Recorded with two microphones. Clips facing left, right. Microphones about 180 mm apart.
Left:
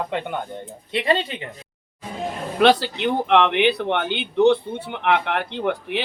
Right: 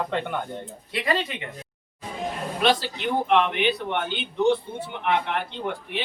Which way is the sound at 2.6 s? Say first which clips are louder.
Left 7 dB; 70° left (ahead or behind).